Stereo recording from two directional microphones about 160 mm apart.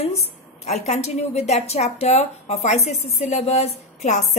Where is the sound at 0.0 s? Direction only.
40° left (ahead or behind).